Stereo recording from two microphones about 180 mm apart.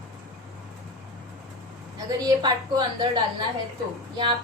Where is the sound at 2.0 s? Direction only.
25° right (ahead or behind).